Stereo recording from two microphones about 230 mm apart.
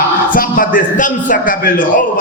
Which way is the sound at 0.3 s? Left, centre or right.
Left.